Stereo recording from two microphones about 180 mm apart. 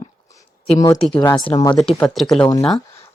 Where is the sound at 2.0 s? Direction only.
Centre (ahead or behind).